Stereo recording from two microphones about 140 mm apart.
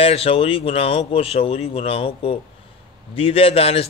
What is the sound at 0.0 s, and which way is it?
A man's voice, 45° left (ahead or behind).